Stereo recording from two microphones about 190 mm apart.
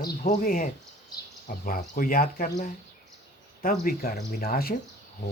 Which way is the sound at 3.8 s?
50° left (ahead or behind).